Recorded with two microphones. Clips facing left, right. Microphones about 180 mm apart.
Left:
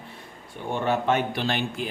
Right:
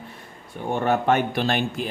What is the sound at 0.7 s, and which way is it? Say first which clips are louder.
Speech: right 3 dB; 50° right (ahead or behind).